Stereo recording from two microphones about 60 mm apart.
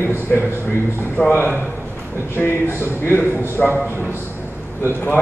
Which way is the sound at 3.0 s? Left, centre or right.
Left.